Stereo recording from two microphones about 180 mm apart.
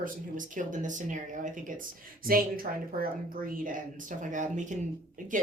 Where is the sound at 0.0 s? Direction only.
45° right (ahead or behind).